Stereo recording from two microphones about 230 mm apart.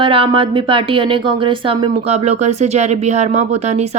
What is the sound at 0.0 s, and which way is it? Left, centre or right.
Speech, right.